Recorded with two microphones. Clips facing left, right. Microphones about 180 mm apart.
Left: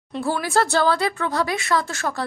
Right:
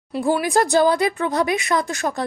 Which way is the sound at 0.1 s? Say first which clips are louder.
Right 3 dB; 15° right (ahead or behind).